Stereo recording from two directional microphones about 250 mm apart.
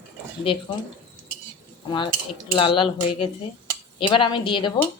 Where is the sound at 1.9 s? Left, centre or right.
Centre.